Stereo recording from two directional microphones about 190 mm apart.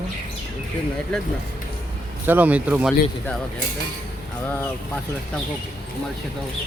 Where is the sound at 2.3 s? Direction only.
10° right (ahead or behind).